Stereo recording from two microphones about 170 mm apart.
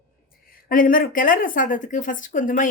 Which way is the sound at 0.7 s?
55° left (ahead or behind).